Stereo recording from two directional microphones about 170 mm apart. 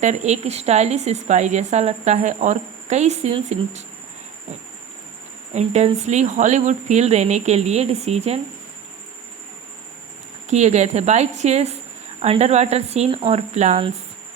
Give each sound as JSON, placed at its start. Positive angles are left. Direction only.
{"t": 0.0, "sound": "a woman's voice", "side_deg": -45}
{"t": 5.5, "sound": "a woman's voice", "side_deg": -40}
{"t": 10.5, "sound": "a woman's voice", "side_deg": -40}